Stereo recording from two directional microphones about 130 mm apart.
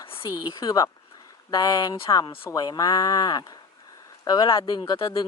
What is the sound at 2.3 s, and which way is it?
Speech, 20° left (ahead or behind).